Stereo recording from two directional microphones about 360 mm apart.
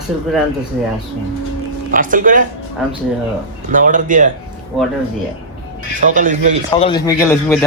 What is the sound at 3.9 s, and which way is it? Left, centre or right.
Speech, right.